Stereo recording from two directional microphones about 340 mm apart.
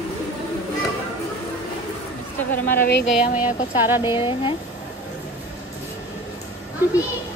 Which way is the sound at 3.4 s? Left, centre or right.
Centre.